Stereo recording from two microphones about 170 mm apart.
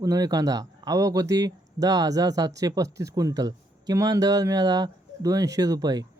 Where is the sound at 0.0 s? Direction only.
20° right (ahead or behind).